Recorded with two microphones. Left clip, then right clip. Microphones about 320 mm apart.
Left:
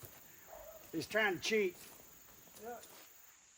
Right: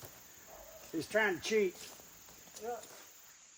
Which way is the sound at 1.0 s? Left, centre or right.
Centre.